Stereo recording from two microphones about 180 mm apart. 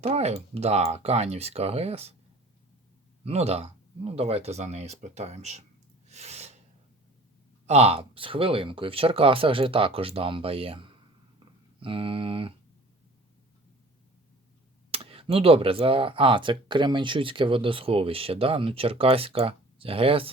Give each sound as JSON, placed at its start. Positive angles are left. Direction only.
{"t": 0.0, "sound": "speech", "side_deg": -35}
{"t": 3.2, "sound": "speech", "side_deg": -35}
{"t": 6.1, "sound": "a sound", "side_deg": -40}
{"t": 7.7, "sound": "speech", "side_deg": -35}
{"t": 14.8, "sound": "speech", "side_deg": -30}